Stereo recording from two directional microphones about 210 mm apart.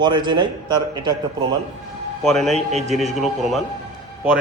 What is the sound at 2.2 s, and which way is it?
Speech, centre (ahead or behind).